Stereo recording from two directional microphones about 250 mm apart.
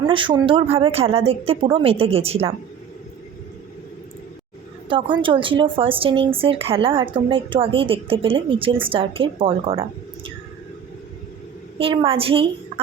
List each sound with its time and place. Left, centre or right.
0.0 s speech: centre
4.9 s speech: centre
11.8 s speech: right